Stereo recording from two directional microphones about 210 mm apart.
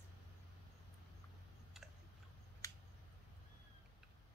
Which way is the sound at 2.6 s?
15° left (ahead or behind).